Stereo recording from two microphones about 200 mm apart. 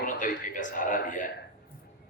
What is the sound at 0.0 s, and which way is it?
A man's voice, 40° left (ahead or behind).